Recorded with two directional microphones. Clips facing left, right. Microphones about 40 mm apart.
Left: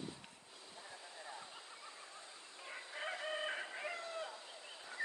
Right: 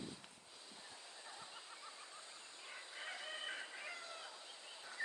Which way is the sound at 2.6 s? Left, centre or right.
Centre.